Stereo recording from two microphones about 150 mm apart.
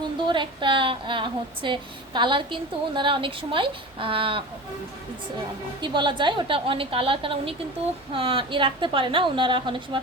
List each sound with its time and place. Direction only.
0.3 s a woman's voice: 35° right (ahead or behind)
5.8 s a woman's voice: 30° right (ahead or behind)